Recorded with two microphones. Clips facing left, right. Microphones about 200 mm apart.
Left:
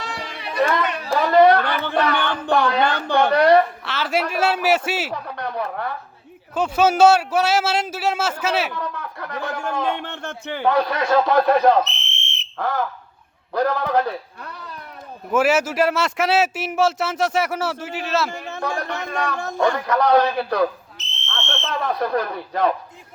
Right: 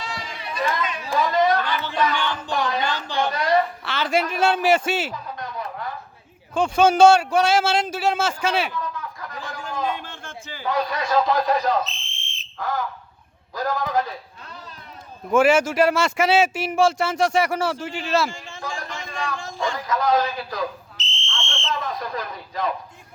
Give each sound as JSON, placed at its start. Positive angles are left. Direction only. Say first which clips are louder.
{"t": 0.0, "sound": "chatter", "louder": "left 2 dB", "side_deg": 60}
{"t": 1.3, "sound": "a sound", "louder": "left 9 dB", "side_deg": 60}
{"t": 3.8, "sound": "a man's voice", "louder": "even", "side_deg": 5}
{"t": 5.1, "sound": "a sound", "louder": "left 5 dB", "side_deg": 65}
{"t": 6.5, "sound": "speech", "louder": "right 1 dB", "side_deg": 5}
{"t": 8.7, "sound": "speech", "louder": "left 1 dB", "side_deg": 65}
{"t": 13.5, "sound": "a sound", "louder": "left 4 dB", "side_deg": 60}
{"t": 15.3, "sound": "speech", "louder": "right 1 dB", "side_deg": 5}
{"t": 18.3, "sound": "speech", "louder": "left 6 dB", "side_deg": 60}
{"t": 21.2, "sound": "fire alarm", "louder": "left 2 dB", "side_deg": 60}